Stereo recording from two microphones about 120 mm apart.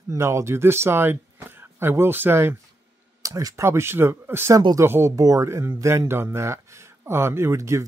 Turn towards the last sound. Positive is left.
turn(degrees=-25)  # may be behind; listen again after turning